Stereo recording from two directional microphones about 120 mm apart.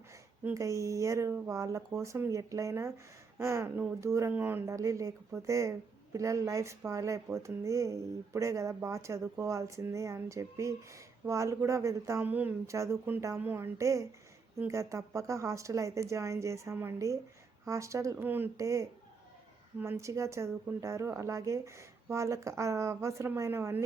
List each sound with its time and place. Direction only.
0.5 s speech: 25° right (ahead or behind)